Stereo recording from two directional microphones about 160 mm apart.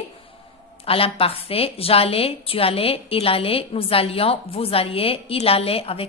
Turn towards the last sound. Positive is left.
turn(degrees=35)  # may be behind; listen again after turning